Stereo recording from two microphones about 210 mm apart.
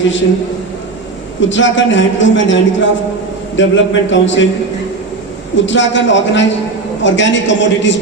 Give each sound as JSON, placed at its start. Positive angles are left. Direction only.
{"t": 0.0, "sound": "a man's voice", "side_deg": 60}
{"t": 1.4, "sound": "a man's voice", "side_deg": 65}
{"t": 5.6, "sound": "a man's voice", "side_deg": 60}